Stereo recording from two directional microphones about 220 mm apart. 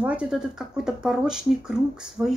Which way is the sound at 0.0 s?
5° right (ahead or behind).